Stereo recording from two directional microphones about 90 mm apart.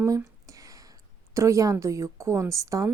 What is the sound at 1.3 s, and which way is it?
Speech, 35° right (ahead or behind).